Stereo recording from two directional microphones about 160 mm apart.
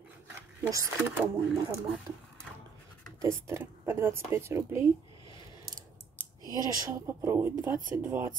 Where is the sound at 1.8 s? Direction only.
Centre (ahead or behind).